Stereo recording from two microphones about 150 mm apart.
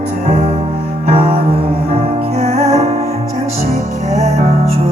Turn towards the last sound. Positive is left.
turn(degrees=-45)  # may be behind; listen again after turning